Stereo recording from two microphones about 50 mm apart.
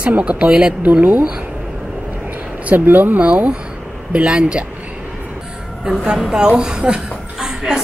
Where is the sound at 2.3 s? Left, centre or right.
Right.